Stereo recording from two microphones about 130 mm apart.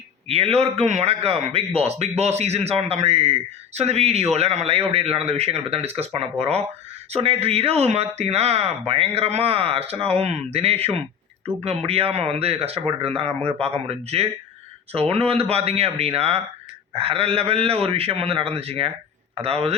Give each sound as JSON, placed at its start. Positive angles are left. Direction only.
{"t": 0.3, "sound": "a man's voice", "side_deg": -50}